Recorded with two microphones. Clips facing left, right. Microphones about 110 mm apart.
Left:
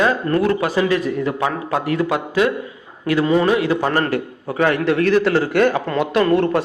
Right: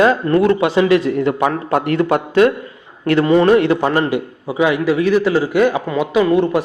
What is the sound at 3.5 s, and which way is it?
Speech, 50° right (ahead or behind).